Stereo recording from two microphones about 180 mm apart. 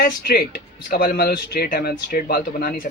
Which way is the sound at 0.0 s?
60° left (ahead or behind).